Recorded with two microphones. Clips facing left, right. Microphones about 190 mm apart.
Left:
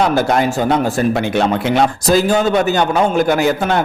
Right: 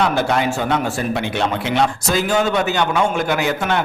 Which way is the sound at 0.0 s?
40° left (ahead or behind).